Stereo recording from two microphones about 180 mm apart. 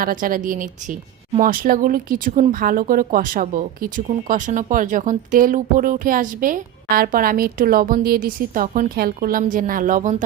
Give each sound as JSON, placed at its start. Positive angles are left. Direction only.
{"t": 0.0, "sound": "speech", "side_deg": -50}